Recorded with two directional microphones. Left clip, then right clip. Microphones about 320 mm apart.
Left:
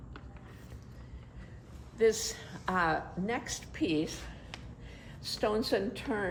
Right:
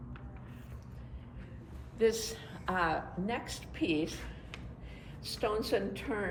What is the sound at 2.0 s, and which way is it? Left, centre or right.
A woman's voice, left.